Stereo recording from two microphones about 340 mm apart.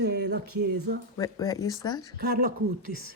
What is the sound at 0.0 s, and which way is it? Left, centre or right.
Speech, right.